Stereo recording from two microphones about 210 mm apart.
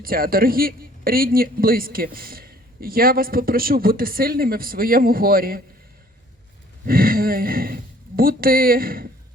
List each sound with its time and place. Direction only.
0.0 s a man's voice: 45° right (ahead or behind)
6.8 s speech: 45° right (ahead or behind)